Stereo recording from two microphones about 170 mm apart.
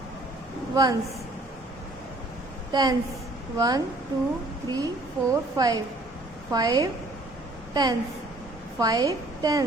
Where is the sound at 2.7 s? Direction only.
25° right (ahead or behind).